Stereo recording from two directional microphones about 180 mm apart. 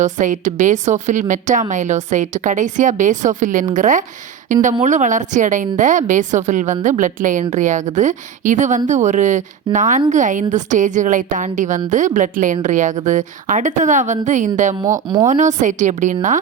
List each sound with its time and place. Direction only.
0.0 s a woman's voice: 45° right (ahead or behind)
15.0 s speech: 25° right (ahead or behind)
15.3 s a woman's voice: 40° right (ahead or behind)